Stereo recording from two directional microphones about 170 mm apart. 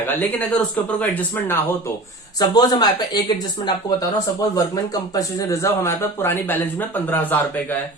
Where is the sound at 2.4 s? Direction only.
25° left (ahead or behind).